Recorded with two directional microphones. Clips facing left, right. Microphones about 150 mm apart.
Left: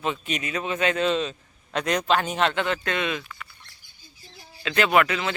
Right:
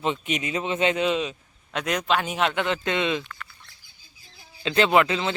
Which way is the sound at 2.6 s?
20° right (ahead or behind).